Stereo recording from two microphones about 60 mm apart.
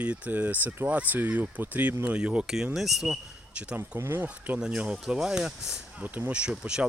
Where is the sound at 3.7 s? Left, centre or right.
Right.